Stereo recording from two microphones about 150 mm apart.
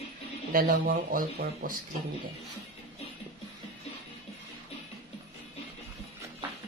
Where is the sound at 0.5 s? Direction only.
80° right.